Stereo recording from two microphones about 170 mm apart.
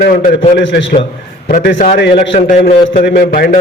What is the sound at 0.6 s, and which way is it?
Speech, 90° left.